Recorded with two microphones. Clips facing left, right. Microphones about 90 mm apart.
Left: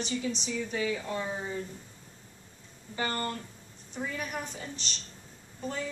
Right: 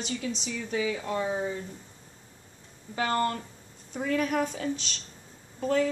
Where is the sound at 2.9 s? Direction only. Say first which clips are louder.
Right 6 dB; 85° right.